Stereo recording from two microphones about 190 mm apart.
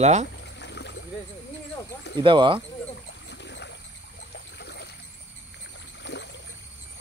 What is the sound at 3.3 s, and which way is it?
Boat, 65° left (ahead or behind).